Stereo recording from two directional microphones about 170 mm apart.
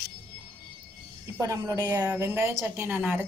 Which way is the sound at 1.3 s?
20° right (ahead or behind).